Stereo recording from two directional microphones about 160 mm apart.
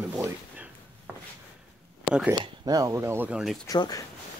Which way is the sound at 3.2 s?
5° right (ahead or behind).